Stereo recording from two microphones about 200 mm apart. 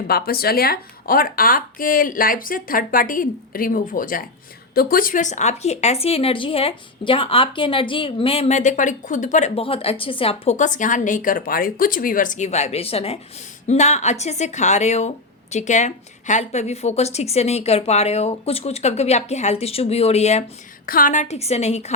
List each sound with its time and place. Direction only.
0.1 s speech: 50° left (ahead or behind); by 20.4 s 35° left (ahead or behind)
20.8 s speech: 45° left (ahead or behind)